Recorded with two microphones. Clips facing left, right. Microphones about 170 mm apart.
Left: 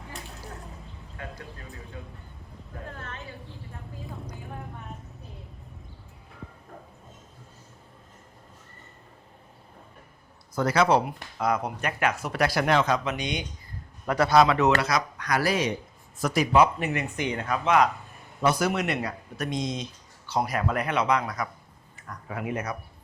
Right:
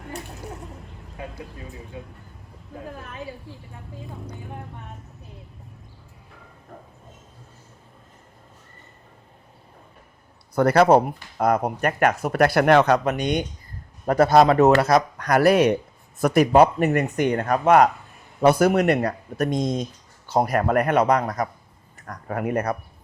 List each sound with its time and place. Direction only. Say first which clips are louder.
1.6 s speech: right 4 dB; centre (ahead or behind)
10.5 s speech: right 6 dB; 60° right (ahead or behind)
22.0 s speech: right 6 dB; 55° right (ahead or behind)